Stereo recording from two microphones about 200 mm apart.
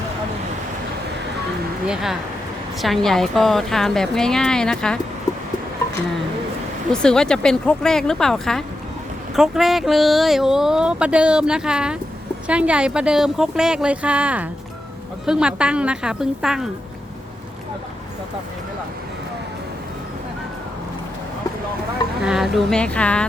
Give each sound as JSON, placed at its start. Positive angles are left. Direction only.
{"t": 1.9, "sound": "speech", "side_deg": 0}
{"t": 6.9, "sound": "speech", "side_deg": 5}
{"t": 22.2, "sound": "speech", "side_deg": -5}